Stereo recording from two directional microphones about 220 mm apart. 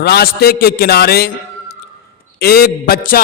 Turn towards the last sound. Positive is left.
turn(degrees=40)  # may be behind; listen again after turning